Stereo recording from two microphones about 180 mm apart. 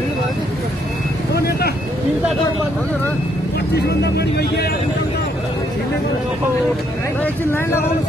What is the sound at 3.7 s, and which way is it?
Speech, 65° left (ahead or behind).